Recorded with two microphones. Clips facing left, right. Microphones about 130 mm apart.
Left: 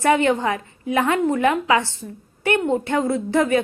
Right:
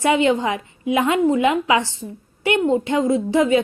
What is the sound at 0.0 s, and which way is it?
A woman's voice, 15° right (ahead or behind).